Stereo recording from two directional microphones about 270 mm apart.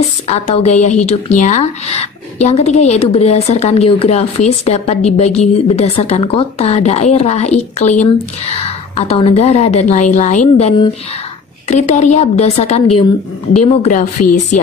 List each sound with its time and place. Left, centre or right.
0.3 s speech: left